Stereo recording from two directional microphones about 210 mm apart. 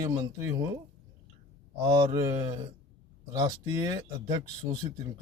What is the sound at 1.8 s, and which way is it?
Speech, 20° right (ahead or behind).